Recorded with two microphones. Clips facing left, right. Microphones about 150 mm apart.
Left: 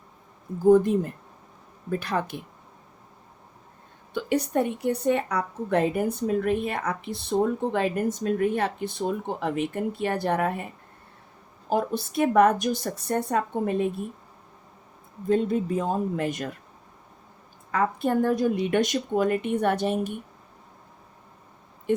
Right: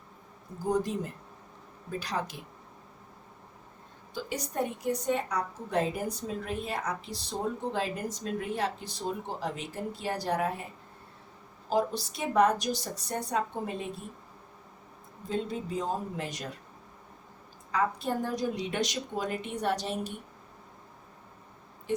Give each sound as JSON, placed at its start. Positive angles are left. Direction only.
{"t": 0.7, "sound": "a woman's voice", "side_deg": 55}
{"t": 4.1, "sound": "a woman's voice", "side_deg": 65}
{"t": 11.7, "sound": "a woman's voice", "side_deg": 55}
{"t": 15.3, "sound": "a woman's voice", "side_deg": 55}
{"t": 17.7, "sound": "a woman's voice", "side_deg": 55}
{"t": 21.9, "sound": "speech", "side_deg": 55}